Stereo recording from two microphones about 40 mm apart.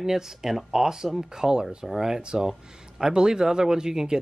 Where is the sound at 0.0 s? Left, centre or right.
Centre.